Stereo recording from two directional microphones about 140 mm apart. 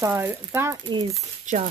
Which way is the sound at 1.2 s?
55° right (ahead or behind).